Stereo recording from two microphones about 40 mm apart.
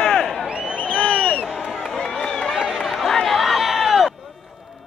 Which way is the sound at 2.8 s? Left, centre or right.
Centre.